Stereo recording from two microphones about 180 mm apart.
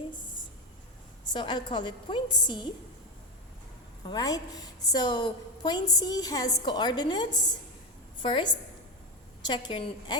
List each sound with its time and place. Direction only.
1.3 s a woman's voice: 25° left (ahead or behind)
4.1 s a woman's voice: 20° left (ahead or behind)